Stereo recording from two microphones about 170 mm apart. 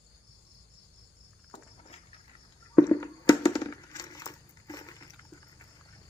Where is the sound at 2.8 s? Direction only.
20° left (ahead or behind).